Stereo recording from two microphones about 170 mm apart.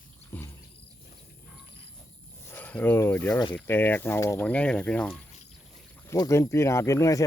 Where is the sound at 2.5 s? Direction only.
10° left (ahead or behind).